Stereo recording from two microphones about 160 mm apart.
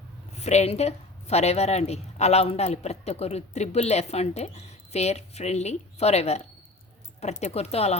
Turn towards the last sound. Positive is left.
turn(degrees=40)  # may be behind; listen again after turning